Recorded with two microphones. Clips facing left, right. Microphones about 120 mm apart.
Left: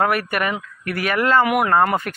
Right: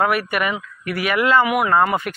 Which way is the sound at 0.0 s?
45° left (ahead or behind).